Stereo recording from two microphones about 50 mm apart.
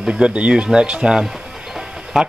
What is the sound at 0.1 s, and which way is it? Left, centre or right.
Speech, right.